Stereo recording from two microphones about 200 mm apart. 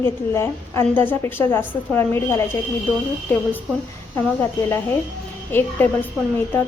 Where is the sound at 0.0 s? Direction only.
10° left (ahead or behind).